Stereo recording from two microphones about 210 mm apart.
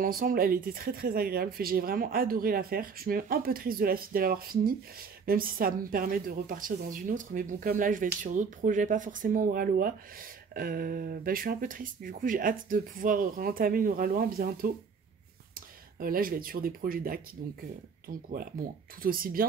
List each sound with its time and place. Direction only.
0.0 s speech: 40° right (ahead or behind)